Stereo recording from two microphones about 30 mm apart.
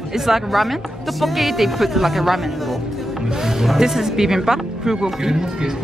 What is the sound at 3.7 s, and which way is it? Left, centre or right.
Speech, centre.